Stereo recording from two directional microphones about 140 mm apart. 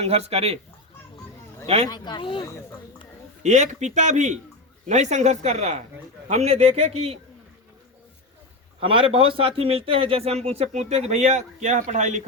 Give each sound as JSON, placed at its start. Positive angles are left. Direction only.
{"t": 0.0, "sound": "speech", "side_deg": -45}
{"t": 1.6, "sound": "speech", "side_deg": -50}
{"t": 1.9, "sound": "speech", "side_deg": 35}
{"t": 2.4, "sound": "speech", "side_deg": 20}
{"t": 3.4, "sound": "a man's voice", "side_deg": -60}
{"t": 8.8, "sound": "speech", "side_deg": -40}